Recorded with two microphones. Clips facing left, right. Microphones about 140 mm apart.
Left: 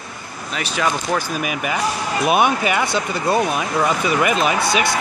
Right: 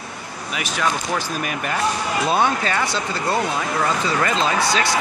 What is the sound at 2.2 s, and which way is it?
Speech, 15° left (ahead or behind).